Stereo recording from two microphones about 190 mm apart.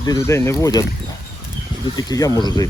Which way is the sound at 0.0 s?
20° left (ahead or behind).